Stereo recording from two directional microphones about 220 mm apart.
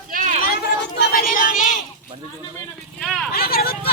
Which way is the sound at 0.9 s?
45° left (ahead or behind).